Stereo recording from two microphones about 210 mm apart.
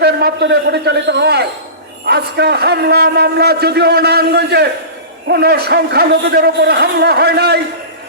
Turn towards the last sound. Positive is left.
turn(degrees=-50)  # may be behind; listen again after turning